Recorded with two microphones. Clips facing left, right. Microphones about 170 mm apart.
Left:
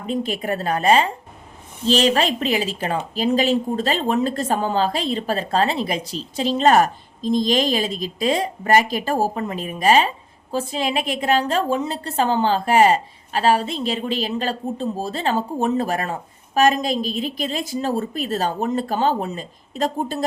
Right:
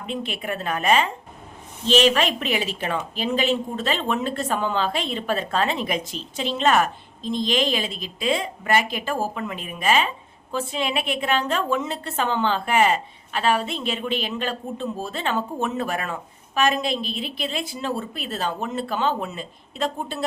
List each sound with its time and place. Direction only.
0.1 s a woman's voice: 40° left (ahead or behind)